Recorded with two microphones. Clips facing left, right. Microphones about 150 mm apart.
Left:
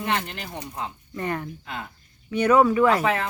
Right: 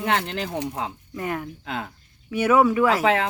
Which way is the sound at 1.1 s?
5° right (ahead or behind).